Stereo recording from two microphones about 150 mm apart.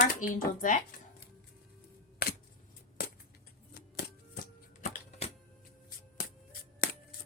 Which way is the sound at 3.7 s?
90° left.